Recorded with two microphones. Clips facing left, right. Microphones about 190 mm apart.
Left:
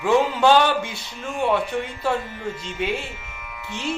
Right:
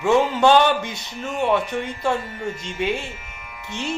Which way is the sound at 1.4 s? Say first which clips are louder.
Right 1 dB; 20° right (ahead or behind).